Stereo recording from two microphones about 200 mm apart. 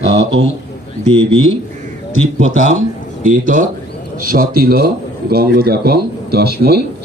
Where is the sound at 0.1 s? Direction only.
30° right (ahead or behind).